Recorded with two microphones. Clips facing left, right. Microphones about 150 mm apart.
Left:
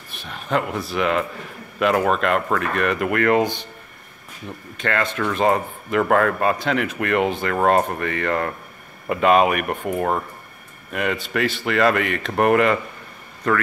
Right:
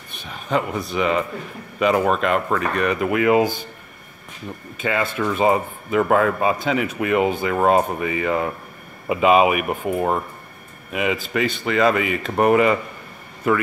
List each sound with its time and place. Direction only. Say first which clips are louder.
0.1 s speech: even; centre (ahead or behind)
4.7 s a man's voice: even; 5° right (ahead or behind)